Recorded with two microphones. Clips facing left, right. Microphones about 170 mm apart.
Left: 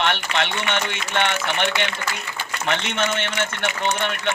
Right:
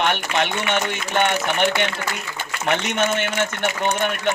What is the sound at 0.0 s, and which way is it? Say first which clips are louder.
Speech: right 2 dB; 45° right (ahead or behind).